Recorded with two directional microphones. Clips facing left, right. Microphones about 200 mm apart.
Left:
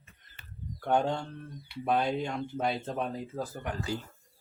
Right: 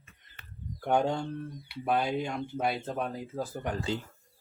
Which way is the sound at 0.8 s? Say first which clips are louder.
Right 1 dB; 10° right (ahead or behind).